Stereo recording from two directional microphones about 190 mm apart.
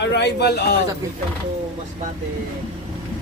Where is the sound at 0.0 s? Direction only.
65° left (ahead or behind).